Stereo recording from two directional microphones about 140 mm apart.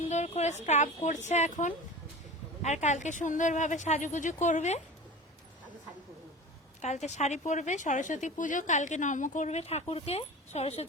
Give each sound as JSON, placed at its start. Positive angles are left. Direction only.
{"t": 0.1, "sound": "a woman's voice", "side_deg": 55}
{"t": 6.8, "sound": "a woman's voice", "side_deg": 55}